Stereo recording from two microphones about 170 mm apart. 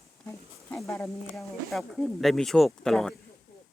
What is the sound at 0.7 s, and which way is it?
Speech, centre (ahead or behind).